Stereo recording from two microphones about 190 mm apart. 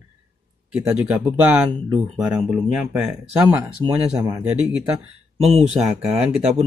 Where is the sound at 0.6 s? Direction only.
5° right (ahead or behind).